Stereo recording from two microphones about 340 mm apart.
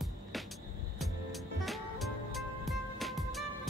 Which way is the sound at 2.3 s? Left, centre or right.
Centre.